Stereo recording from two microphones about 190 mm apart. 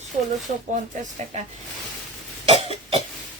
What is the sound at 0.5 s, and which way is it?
Speech, 35° right (ahead or behind).